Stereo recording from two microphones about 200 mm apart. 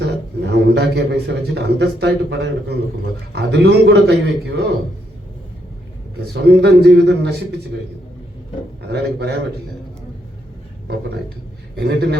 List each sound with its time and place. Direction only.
0.0 s a man's voice: 55° right (ahead or behind)
6.4 s a man's voice: 55° right (ahead or behind)
8.9 s a man's voice: 55° right (ahead or behind)
11.8 s a man's voice: 55° right (ahead or behind)